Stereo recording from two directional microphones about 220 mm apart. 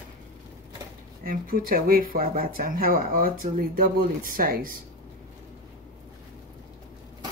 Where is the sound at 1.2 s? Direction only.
40° right (ahead or behind).